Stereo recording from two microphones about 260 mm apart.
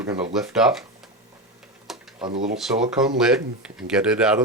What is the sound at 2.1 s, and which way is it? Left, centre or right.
Speech, right.